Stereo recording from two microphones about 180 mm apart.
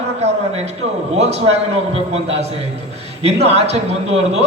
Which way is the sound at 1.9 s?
35° right (ahead or behind).